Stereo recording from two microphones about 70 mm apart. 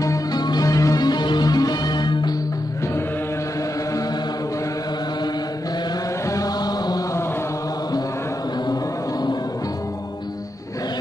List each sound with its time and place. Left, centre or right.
0.0 s music: left
6.3 s chant: left